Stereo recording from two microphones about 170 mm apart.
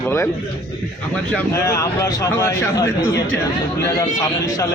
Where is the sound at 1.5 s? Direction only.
20° left (ahead or behind).